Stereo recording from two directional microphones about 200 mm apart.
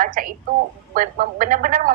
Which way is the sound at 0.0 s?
45° right (ahead or behind).